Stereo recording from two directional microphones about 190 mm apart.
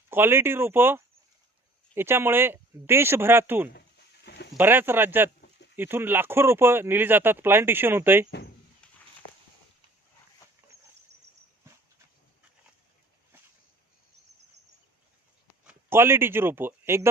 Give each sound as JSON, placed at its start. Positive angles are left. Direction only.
{"t": 0.1, "sound": "speech", "side_deg": -10}
{"t": 3.8, "sound": "a sound", "side_deg": 60}
{"t": 4.5, "sound": "speech", "side_deg": -10}
{"t": 8.3, "sound": "speech", "side_deg": 60}
{"t": 15.6, "sound": "speech", "side_deg": -10}